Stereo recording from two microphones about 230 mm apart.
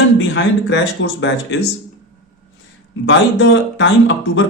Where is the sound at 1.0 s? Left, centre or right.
Left.